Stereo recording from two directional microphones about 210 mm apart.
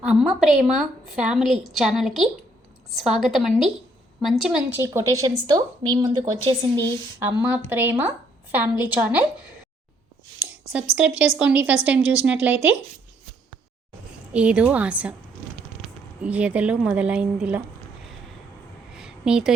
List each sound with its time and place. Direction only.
0.0 s a woman's voice: 5° right (ahead or behind)
10.4 s a sound: 5° right (ahead or behind)
10.9 s a woman's voice: 5° right (ahead or behind)
14.3 s a woman's voice: 5° right (ahead or behind)
16.2 s a woman's voice: 5° right (ahead or behind)
18.9 s a sound: 5° right (ahead or behind)